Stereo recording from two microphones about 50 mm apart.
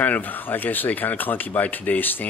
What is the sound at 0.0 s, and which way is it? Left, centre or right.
Speech, left.